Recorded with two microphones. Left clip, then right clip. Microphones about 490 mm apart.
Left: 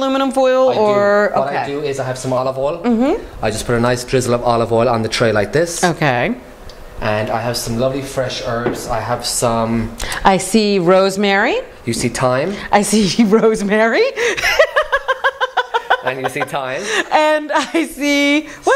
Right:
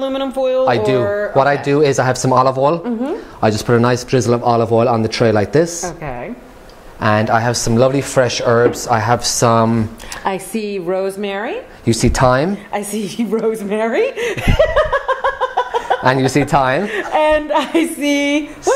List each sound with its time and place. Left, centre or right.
0.0 s a woman's voice: left
1.0 s speech: left
1.4 s speech: right
2.3 s speech: right
2.8 s a woman's voice: left
3.3 s speech: right
5.9 s a woman's voice: left
7.0 s speech: right
7.8 s speech: right
10.2 s a woman's voice: centre
11.8 s speech: right
12.7 s chuckle: left
16.0 s speech: right
16.8 s a woman's voice: left